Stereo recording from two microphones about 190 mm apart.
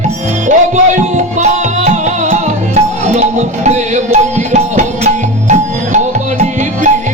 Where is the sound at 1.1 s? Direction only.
40° right (ahead or behind).